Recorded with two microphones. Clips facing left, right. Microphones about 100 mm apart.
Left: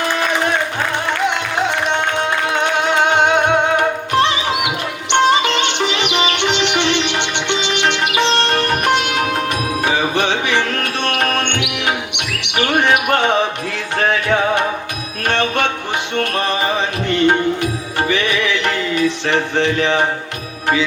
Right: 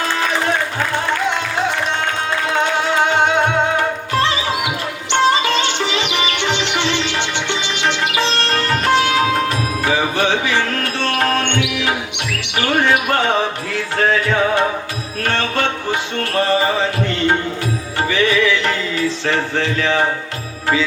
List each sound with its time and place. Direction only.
1.1 s music: 20° left (ahead or behind)
7.8 s sitar: 20° left (ahead or behind)
9.5 s music: 20° left (ahead or behind)